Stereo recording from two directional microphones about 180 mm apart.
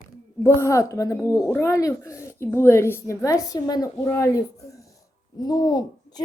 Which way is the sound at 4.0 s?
15° left (ahead or behind).